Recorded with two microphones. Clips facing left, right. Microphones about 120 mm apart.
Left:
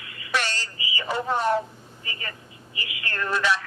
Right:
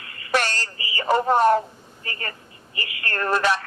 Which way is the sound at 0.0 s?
50° right (ahead or behind).